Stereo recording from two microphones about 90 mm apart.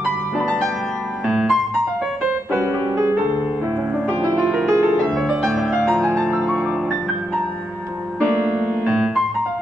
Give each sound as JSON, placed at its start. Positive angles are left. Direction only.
{"t": 1.2, "sound": "music", "side_deg": -5}
{"t": 2.5, "sound": "music", "side_deg": -30}
{"t": 4.5, "sound": "music", "side_deg": 0}
{"t": 8.8, "sound": "music", "side_deg": -5}